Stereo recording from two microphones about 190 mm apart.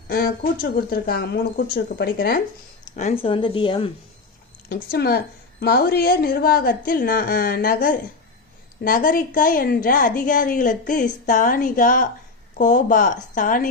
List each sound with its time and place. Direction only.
0.1 s a woman's voice: 50° left (ahead or behind)
2.9 s speech: 35° left (ahead or behind)
4.7 s a woman's voice: 55° left (ahead or behind)